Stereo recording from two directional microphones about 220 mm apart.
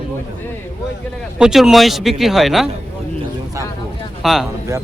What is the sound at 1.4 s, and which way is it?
Speech, centre (ahead or behind).